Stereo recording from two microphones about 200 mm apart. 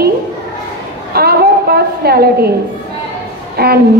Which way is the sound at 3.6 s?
50° right (ahead or behind).